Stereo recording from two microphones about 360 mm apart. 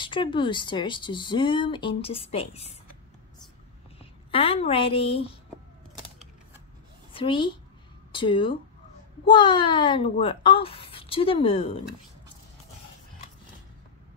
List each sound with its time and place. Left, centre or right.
0.0 s speech: centre
4.0 s a woman's voice: centre
7.1 s a woman's voice: centre